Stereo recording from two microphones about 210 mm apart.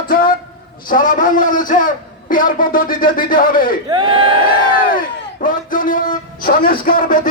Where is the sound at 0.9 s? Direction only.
40° left (ahead or behind).